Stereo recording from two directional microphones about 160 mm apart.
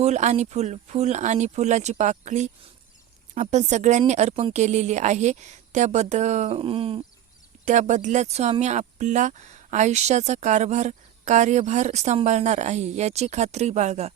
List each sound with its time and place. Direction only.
0.0 s speech: 45° right (ahead or behind)
7.6 s speech: 50° right (ahead or behind)